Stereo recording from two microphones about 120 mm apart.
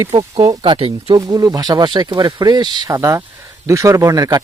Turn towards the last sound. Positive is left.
turn(degrees=-30)  # may be behind; listen again after turning